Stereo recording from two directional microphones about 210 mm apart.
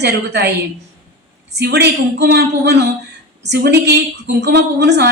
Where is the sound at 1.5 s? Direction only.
50° right (ahead or behind).